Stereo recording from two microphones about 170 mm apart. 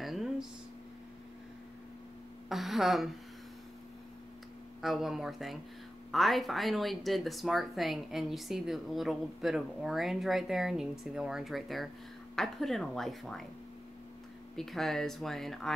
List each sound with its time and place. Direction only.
0.0 s a sound: centre (ahead or behind)
2.5 s speech: centre (ahead or behind)
4.8 s speech: centre (ahead or behind)
14.5 s speech: centre (ahead or behind)